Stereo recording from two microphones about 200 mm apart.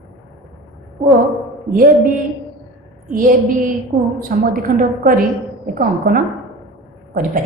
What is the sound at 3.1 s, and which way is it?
A woman's voice, 45° right (ahead or behind).